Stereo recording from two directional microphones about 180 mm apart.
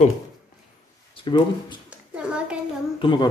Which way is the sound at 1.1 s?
25° left (ahead or behind).